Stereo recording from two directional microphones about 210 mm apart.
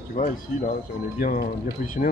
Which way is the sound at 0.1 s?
40° left (ahead or behind).